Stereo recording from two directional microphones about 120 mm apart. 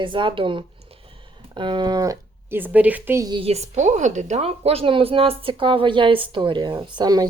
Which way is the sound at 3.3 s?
55° right (ahead or behind).